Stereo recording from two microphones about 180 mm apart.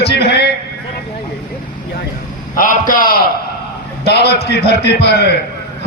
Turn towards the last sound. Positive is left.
turn(degrees=70)  # may be behind; listen again after turning